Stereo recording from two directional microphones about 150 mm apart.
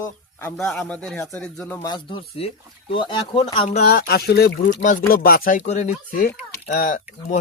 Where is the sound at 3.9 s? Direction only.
90° left.